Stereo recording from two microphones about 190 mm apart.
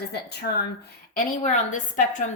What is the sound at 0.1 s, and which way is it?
Speech, 60° left (ahead or behind).